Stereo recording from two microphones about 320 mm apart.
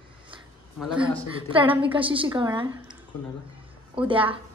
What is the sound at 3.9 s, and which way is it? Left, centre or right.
Speech, centre.